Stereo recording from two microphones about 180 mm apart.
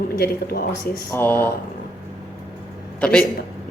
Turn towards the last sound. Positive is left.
turn(degrees=5)  # may be behind; listen again after turning